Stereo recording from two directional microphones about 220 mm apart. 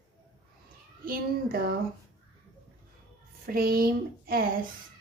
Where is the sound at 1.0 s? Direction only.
40° right (ahead or behind).